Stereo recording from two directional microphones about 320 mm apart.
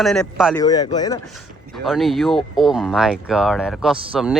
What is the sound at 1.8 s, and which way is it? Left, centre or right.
Speech, centre.